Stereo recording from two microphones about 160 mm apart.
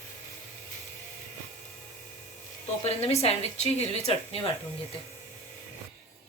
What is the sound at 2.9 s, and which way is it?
A woman's voice, 40° left (ahead or behind).